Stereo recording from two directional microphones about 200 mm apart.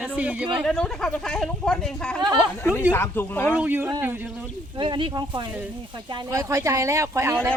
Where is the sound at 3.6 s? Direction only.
10° right (ahead or behind).